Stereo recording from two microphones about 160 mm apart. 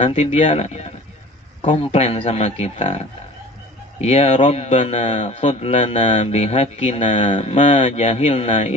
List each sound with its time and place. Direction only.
0.0 s a man's voice: 40° left (ahead or behind)
4.0 s a man's voice: 45° left (ahead or behind)